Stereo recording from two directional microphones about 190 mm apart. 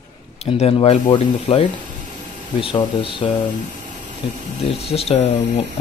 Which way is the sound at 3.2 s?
30° left (ahead or behind).